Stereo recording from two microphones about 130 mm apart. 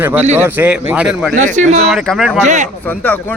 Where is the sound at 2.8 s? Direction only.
15° left (ahead or behind).